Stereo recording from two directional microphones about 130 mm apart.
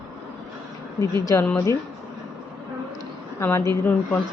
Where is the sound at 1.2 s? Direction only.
20° left (ahead or behind).